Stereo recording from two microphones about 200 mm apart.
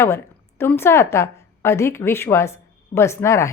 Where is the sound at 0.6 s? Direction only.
10° left (ahead or behind).